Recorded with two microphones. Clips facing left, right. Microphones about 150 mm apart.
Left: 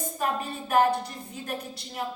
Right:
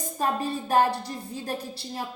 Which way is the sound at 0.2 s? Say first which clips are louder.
Right 4 dB; 30° right (ahead or behind).